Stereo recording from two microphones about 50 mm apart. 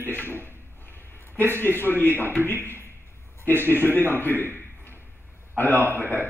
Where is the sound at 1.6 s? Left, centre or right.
Left.